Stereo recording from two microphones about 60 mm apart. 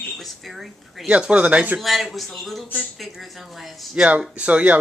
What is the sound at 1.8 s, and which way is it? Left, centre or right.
Speech, centre.